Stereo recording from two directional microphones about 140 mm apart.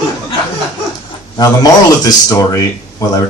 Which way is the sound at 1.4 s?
25° left (ahead or behind).